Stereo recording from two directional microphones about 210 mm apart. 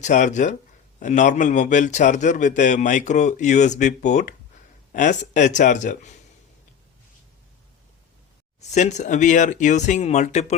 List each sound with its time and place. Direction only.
0.0 s a man's voice: 35° left (ahead or behind)
8.7 s a man's voice: 35° left (ahead or behind)